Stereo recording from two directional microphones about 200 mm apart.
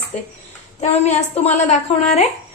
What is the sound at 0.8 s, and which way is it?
Speech, 35° left (ahead or behind).